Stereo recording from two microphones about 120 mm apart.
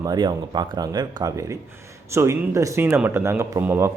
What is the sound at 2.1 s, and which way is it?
Speech, 25° right (ahead or behind).